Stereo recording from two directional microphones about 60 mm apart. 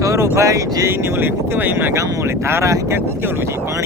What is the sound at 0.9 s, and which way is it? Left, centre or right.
Speech, right.